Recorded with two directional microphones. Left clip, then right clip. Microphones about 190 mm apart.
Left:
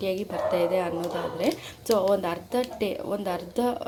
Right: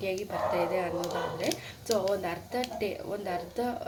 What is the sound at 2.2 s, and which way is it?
Speech, 40° left (ahead or behind).